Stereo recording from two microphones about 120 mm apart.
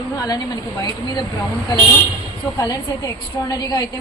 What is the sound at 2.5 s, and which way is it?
A woman's voice, 30° left (ahead or behind).